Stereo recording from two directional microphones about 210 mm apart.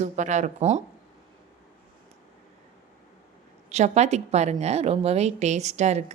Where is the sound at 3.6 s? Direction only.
30° right (ahead or behind).